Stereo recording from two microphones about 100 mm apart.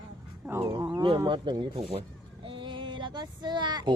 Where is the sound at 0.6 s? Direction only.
50° right (ahead or behind).